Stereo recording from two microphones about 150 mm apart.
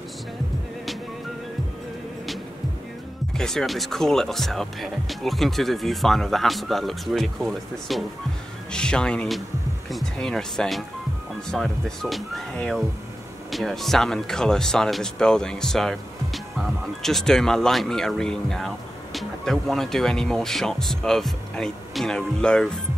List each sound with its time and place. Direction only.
3.3 s speech: 5° left (ahead or behind)